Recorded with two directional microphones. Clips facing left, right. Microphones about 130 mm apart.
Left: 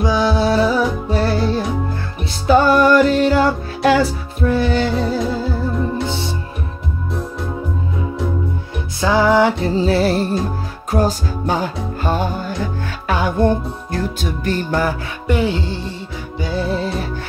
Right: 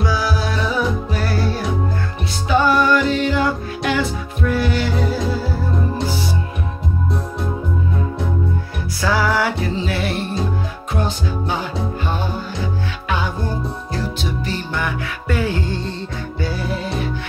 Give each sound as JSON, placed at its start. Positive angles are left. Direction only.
{"t": 0.0, "sound": "music", "side_deg": 20}
{"t": 2.4, "sound": "music", "side_deg": 40}
{"t": 9.0, "sound": "music", "side_deg": 20}
{"t": 9.7, "sound": "music", "side_deg": 35}
{"t": 15.2, "sound": "music", "side_deg": 20}